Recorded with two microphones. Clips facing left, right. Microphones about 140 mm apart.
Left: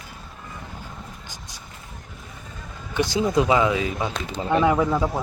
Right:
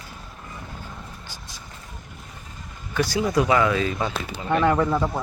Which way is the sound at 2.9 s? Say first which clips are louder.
Left 1 dB; 20° left (ahead or behind).